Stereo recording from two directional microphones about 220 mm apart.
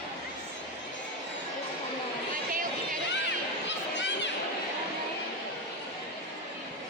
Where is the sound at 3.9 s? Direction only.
55° left (ahead or behind).